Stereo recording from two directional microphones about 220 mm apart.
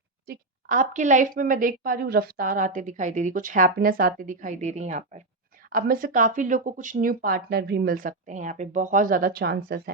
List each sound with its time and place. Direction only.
0.3 s a woman's voice: 35° right (ahead or behind)